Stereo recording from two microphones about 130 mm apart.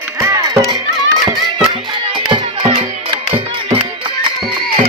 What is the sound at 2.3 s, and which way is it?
Music, 40° right (ahead or behind).